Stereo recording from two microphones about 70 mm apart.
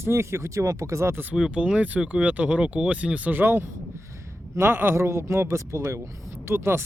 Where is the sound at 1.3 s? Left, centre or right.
Centre.